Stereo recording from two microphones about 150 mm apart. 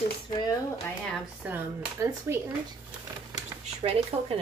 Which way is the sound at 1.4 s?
15° right (ahead or behind).